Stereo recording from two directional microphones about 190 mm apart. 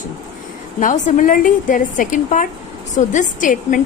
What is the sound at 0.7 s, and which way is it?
A woman's voice, 40° left (ahead or behind).